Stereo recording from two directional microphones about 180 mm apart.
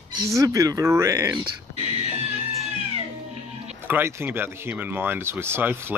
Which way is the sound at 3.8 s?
10° right (ahead or behind).